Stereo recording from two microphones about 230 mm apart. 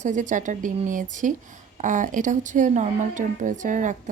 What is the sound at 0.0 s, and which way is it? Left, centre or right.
A woman's voice, right.